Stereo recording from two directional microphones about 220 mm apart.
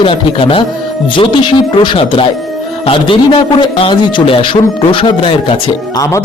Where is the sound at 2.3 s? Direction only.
Centre (ahead or behind).